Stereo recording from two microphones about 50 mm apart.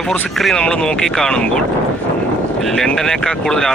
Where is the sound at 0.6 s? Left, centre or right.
Centre.